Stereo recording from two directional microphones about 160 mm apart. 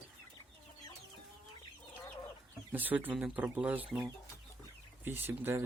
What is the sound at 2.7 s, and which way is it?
Speech, 10° right (ahead or behind).